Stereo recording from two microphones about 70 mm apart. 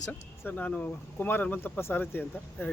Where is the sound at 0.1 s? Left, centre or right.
Left.